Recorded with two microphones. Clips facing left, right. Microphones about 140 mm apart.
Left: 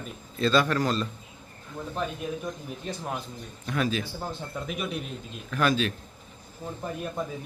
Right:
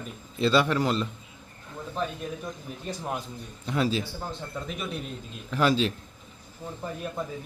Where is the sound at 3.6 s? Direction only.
25° right (ahead or behind).